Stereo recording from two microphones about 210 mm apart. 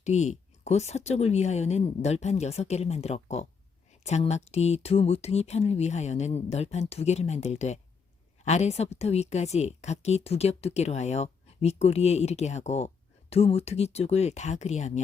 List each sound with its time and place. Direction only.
0.0 s a woman's voice: 35° left (ahead or behind)